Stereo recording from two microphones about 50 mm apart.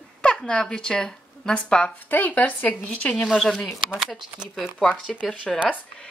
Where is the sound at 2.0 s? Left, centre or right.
Left.